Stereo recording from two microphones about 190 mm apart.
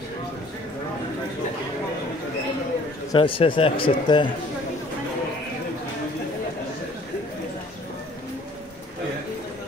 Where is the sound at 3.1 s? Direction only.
25° left (ahead or behind).